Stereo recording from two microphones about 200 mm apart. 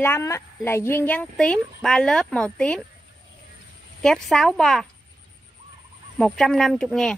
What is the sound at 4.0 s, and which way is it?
Speech, 5° left (ahead or behind).